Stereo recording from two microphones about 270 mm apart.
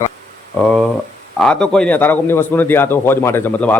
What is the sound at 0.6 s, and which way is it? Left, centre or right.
A man's voice, centre.